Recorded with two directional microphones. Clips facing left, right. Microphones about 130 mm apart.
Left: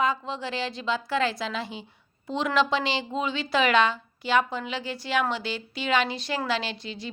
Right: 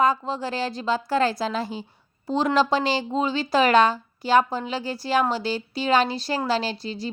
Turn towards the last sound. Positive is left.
turn(degrees=-35)  # may be behind; listen again after turning